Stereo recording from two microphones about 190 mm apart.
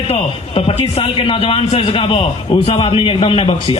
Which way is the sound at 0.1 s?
30° left (ahead or behind).